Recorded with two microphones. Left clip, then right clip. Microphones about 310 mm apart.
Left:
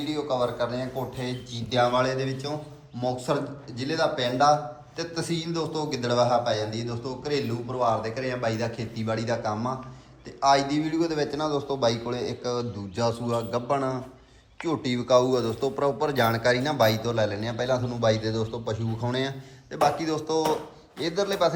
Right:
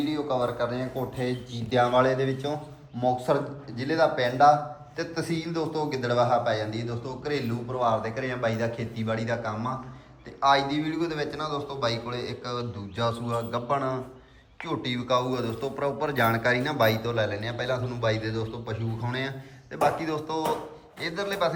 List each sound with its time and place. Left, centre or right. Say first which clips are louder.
0.0 s a man's voice: even; centre